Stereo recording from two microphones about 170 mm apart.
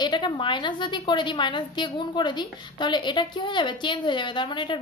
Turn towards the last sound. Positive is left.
turn(degrees=30)  # may be behind; listen again after turning